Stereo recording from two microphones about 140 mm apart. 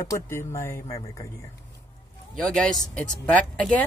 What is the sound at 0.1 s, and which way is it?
Speech, 20° left (ahead or behind).